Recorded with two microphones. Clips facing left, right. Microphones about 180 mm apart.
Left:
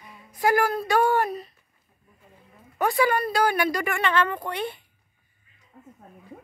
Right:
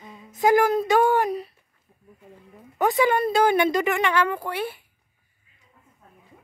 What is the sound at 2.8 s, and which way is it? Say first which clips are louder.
A woman's voice: right 2 dB; 20° right (ahead or behind).